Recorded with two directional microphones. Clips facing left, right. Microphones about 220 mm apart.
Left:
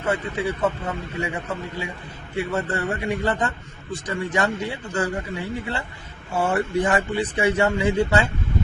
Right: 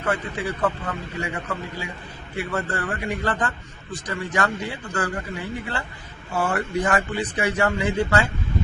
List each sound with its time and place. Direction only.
0.0 s a man's voice: 25° left (ahead or behind)